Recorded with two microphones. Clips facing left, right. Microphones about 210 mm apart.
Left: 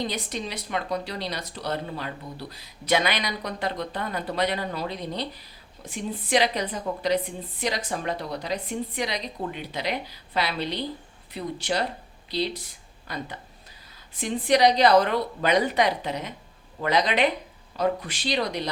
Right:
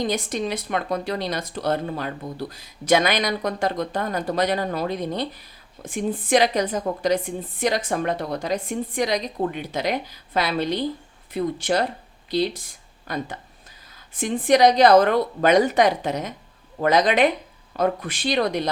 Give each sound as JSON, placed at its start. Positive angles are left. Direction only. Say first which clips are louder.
{"t": 0.0, "sound": "speech", "louder": "right 6 dB", "side_deg": -50}